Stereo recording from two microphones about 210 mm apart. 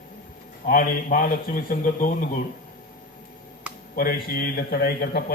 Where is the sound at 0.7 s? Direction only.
40° left (ahead or behind).